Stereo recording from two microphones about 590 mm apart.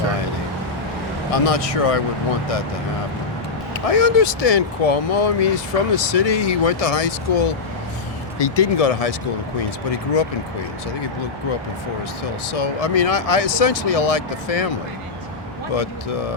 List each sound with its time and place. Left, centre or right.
1.3 s speech: left
3.8 s speech: left
12.5 s speech: left
15.7 s speech: left